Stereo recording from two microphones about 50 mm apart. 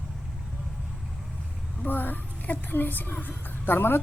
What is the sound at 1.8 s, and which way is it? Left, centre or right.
A child's voice, left.